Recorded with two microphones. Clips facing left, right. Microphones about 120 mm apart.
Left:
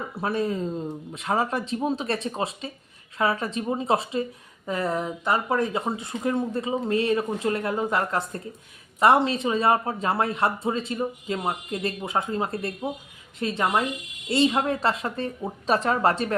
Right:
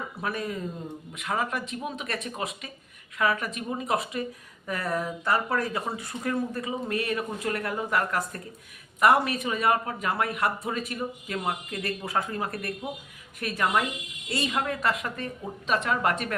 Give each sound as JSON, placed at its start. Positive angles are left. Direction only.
{"t": 0.2, "sound": "a woman's voice", "side_deg": 30}